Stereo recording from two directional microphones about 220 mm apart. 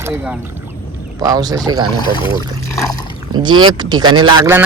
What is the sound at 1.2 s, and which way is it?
Speech, 15° right (ahead or behind).